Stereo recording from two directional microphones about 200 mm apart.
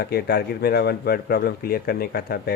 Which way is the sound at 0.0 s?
50° left (ahead or behind).